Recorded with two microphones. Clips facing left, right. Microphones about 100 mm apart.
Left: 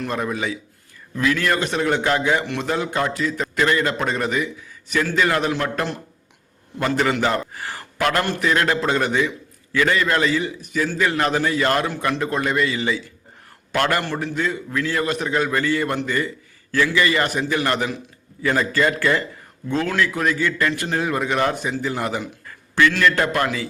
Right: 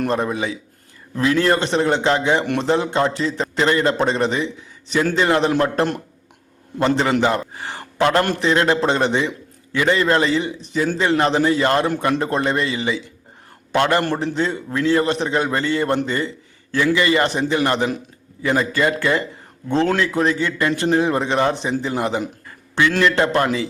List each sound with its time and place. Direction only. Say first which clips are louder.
0.1 s a man's voice: right 3 dB; 25° right (ahead or behind)
19.6 s a man's voice: right 3 dB; 30° right (ahead or behind)